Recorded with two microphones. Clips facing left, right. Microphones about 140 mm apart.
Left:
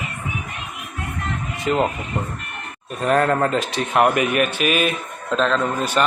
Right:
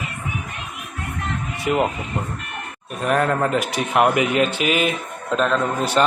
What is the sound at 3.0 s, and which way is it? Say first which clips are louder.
Speech: left 2 dB; 5° right (ahead or behind).